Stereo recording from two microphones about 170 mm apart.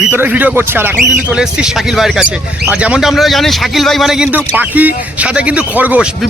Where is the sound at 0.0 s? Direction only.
5° right (ahead or behind).